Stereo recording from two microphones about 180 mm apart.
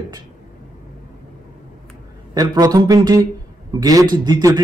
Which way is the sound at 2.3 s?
20° right (ahead or behind).